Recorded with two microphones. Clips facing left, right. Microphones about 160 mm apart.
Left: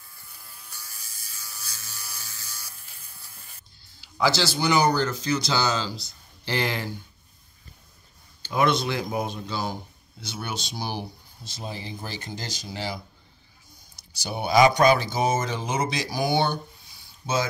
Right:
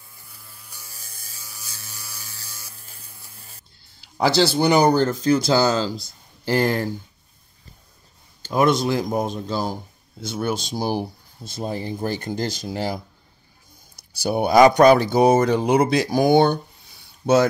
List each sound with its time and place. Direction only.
4.2 s speech: 60° right (ahead or behind)
8.4 s speech: 45° right (ahead or behind); by 17.4 s 60° right (ahead or behind)